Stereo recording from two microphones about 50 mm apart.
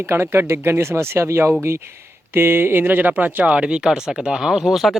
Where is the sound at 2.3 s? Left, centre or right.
Right.